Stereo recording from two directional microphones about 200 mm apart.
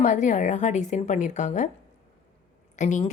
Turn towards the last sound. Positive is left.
turn(degrees=35)  # may be behind; listen again after turning